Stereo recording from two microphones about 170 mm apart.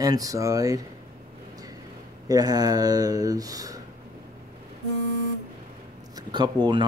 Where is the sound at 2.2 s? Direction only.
20° right (ahead or behind).